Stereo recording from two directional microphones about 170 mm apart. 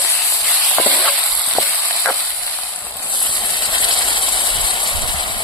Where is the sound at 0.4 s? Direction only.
10° left (ahead or behind).